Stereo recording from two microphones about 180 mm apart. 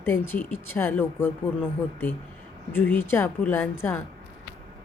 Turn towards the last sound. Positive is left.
turn(degrees=15)  # may be behind; listen again after turning